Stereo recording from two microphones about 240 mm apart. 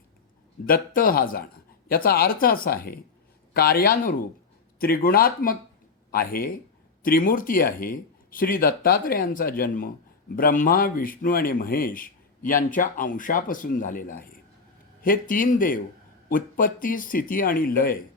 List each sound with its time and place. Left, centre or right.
0.6 s speech: left